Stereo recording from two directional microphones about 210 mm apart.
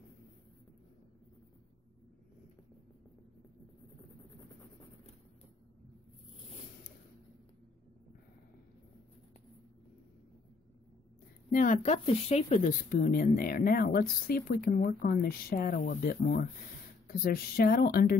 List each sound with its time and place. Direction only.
11.5 s speech: 35° left (ahead or behind)